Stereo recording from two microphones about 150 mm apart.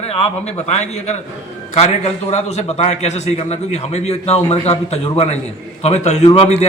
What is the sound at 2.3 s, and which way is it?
A man's voice, 45° left (ahead or behind).